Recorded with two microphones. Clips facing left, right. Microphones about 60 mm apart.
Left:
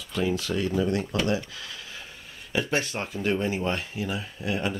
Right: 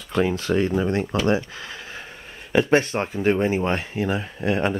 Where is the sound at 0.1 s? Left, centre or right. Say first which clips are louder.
Right 6 dB; right.